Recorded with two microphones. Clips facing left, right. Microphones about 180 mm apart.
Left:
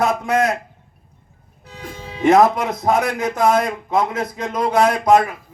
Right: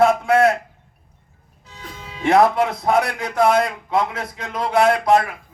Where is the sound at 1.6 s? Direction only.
55° left (ahead or behind).